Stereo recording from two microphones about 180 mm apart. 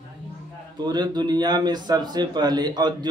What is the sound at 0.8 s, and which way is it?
Speech, 25° right (ahead or behind).